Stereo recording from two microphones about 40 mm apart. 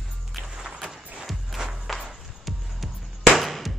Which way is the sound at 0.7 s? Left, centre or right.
Centre.